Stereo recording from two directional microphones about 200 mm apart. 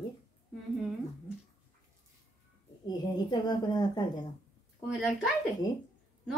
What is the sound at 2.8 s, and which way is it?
Speech, 20° left (ahead or behind).